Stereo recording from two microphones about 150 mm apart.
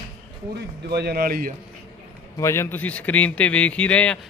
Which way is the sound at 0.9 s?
90° right.